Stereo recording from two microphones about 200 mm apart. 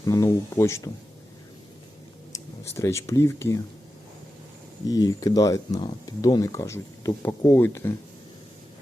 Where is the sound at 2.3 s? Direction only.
15° left (ahead or behind).